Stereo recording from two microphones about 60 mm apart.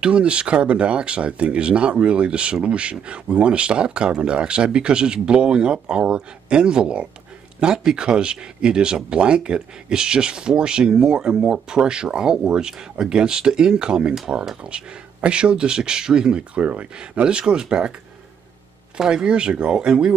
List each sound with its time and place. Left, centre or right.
0.0 s speech: centre
18.9 s speech: centre